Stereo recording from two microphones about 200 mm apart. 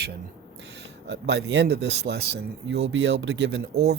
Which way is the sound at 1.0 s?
60° right (ahead or behind).